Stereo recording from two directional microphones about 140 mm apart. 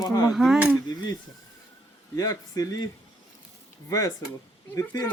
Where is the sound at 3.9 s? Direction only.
25° left (ahead or behind).